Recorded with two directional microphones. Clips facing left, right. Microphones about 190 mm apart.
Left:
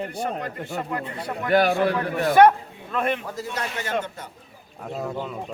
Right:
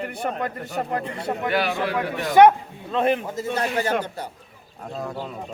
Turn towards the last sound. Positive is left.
turn(degrees=-35)  # may be behind; listen again after turning